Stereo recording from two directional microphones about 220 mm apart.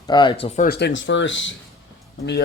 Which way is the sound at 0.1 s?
20° left (ahead or behind).